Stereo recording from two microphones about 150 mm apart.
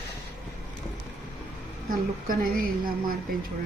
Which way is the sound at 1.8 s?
70° right (ahead or behind).